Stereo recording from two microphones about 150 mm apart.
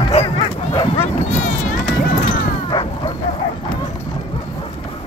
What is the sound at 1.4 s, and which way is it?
Run, 55° left (ahead or behind).